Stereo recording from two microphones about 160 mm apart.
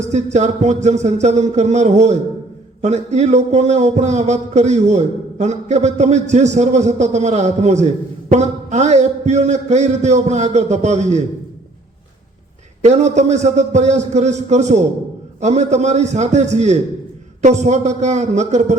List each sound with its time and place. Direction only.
0.0 s a man's voice: 45° right (ahead or behind)
12.8 s a man's voice: 45° right (ahead or behind)